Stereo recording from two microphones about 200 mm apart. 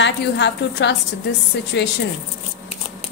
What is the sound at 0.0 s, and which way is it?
Speech, 60° left (ahead or behind).